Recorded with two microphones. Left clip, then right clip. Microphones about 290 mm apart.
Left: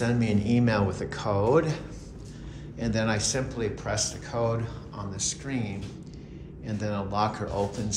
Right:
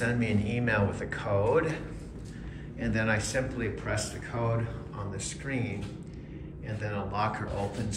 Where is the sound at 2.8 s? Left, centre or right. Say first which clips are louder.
Left 1 dB; centre.